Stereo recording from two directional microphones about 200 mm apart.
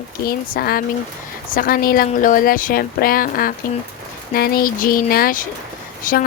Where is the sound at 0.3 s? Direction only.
50° left (ahead or behind).